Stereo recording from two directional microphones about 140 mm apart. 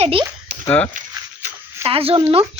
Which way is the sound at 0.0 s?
40° right (ahead or behind).